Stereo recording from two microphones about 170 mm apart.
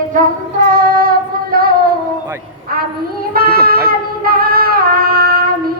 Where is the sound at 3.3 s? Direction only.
65° right (ahead or behind).